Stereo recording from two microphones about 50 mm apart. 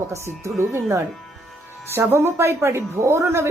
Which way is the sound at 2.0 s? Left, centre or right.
Right.